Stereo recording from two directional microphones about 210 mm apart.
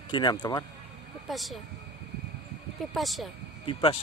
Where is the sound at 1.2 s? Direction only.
Centre (ahead or behind).